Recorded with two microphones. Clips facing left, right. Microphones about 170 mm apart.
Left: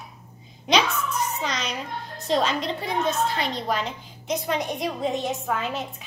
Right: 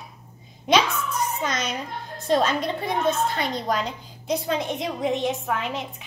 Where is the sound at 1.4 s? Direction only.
50° right (ahead or behind).